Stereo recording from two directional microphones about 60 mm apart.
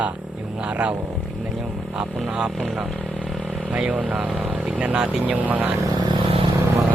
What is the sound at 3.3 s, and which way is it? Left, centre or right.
Motorcycle, centre.